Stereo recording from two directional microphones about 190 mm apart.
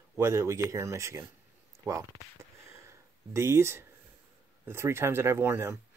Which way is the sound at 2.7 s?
15° right (ahead or behind).